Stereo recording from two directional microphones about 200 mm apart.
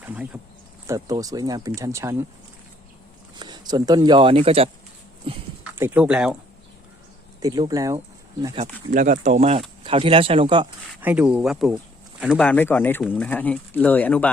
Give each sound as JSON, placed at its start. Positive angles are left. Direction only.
{"t": 0.0, "sound": "a sound", "side_deg": -5}
{"t": 0.9, "sound": "speech", "side_deg": -15}
{"t": 3.3, "sound": "speech", "side_deg": -20}
{"t": 5.7, "sound": "speech", "side_deg": -10}
{"t": 7.4, "sound": "speech", "side_deg": -20}
{"t": 8.5, "sound": "speech", "side_deg": -35}
{"t": 11.0, "sound": "speech", "side_deg": -5}
{"t": 12.5, "sound": "speech", "side_deg": 10}